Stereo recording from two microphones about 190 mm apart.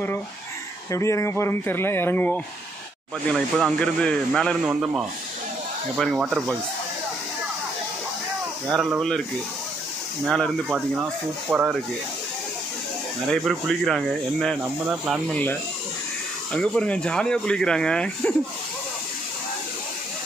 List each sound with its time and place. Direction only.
0.9 s speech: 15° left (ahead or behind); by 5.0 s 5° right (ahead or behind)
8.7 s speech: centre (ahead or behind)
10.2 s speech: centre (ahead or behind)
13.3 s speech: centre (ahead or behind)
16.5 s speech: 5° left (ahead or behind)